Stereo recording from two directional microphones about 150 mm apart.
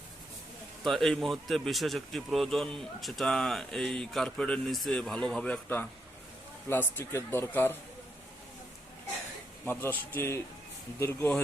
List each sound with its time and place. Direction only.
0.9 s speech: centre (ahead or behind)
9.6 s speech: 15° left (ahead or behind)